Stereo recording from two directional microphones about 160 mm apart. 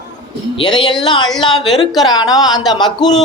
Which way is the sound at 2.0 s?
25° left (ahead or behind).